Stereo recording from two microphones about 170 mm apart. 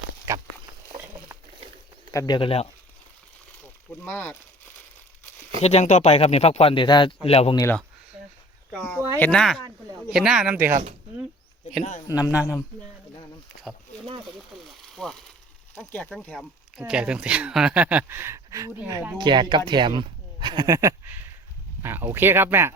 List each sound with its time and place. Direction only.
0.3 s a sound: 15° right (ahead or behind)
2.1 s a man's voice: 25° left (ahead or behind)
4.0 s speech: 10° left (ahead or behind)
5.6 s speech: 40° left (ahead or behind)
7.5 s speech: 15° left (ahead or behind); by 10.7 s 10° right (ahead or behind)
10.7 s speech: 45° right (ahead or behind)
11.8 s speech: 45° left (ahead or behind)
12.0 s a man's voice: 20° left (ahead or behind)
14.8 s a sound: centre (ahead or behind)
15.7 s speech: 10° left (ahead or behind); by 22.7 s 15° right (ahead or behind)